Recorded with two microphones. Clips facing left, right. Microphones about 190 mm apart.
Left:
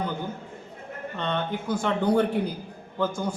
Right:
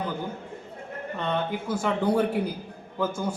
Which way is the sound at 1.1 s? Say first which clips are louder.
Right 1 dB; 5° right (ahead or behind).